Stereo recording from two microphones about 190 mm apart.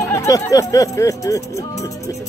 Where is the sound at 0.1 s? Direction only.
15° left (ahead or behind).